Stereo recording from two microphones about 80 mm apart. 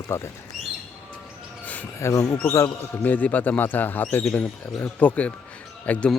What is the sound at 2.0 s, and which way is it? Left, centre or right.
Speech, left.